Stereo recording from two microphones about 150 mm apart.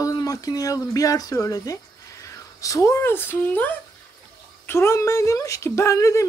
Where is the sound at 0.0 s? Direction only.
25° left (ahead or behind).